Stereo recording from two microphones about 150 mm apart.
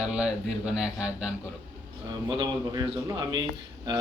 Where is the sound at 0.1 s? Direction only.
5° right (ahead or behind).